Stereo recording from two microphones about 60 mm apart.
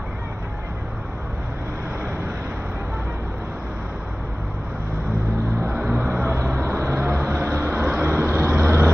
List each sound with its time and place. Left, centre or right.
5.7 s vehicle: right
6.1 s vehicle: right